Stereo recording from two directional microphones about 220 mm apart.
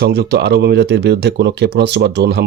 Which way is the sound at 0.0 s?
50° right (ahead or behind).